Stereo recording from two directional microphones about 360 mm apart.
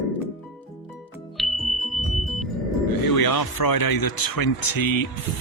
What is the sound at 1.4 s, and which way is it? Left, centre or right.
Music, centre.